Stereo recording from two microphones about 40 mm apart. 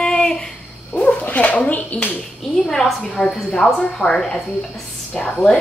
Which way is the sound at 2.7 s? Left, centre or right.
Centre.